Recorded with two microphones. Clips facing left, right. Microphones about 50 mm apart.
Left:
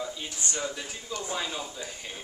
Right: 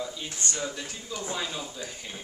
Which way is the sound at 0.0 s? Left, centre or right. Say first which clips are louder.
Right 1 dB; centre.